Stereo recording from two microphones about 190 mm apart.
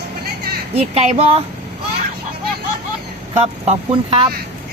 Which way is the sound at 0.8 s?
35° right (ahead or behind).